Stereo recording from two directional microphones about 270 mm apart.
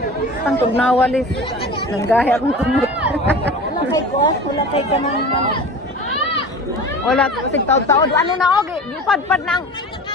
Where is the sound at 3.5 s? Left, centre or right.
Centre.